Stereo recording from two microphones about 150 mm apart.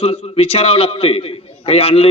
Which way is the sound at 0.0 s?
40° left (ahead or behind).